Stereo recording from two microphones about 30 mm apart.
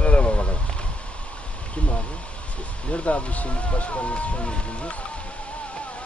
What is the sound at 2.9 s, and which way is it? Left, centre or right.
Speech, left.